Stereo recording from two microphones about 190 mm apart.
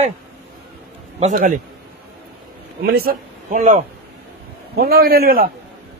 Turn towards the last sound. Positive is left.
turn(degrees=-50)  # may be behind; listen again after turning